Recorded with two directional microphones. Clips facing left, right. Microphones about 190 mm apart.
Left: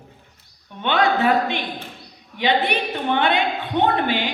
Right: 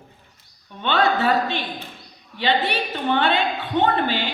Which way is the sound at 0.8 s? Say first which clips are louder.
Left 1 dB; 15° left (ahead or behind).